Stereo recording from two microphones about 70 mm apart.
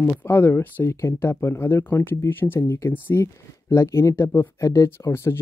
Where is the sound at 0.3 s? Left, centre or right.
Left.